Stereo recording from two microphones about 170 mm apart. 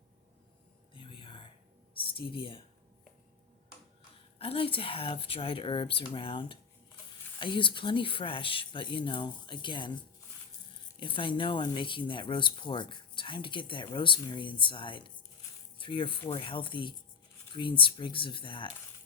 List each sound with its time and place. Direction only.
0.9 s a sound: 30° left (ahead or behind)
2.0 s speech: 30° left (ahead or behind)
4.4 s speech: 35° left (ahead or behind)
11.0 s speech: 30° left (ahead or behind)